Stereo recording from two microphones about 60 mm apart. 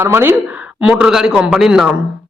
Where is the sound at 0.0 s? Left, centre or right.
Right.